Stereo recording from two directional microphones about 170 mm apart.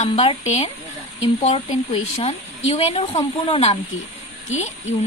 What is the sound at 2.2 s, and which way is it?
Speech, 35° left (ahead or behind).